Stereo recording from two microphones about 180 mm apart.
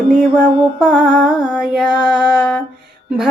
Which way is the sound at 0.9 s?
5° right (ahead or behind).